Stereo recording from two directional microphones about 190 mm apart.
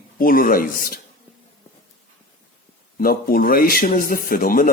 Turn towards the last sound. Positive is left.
turn(degrees=50)  # may be behind; listen again after turning